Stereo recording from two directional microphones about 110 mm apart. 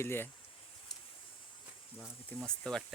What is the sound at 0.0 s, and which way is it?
Speech, 20° left (ahead or behind).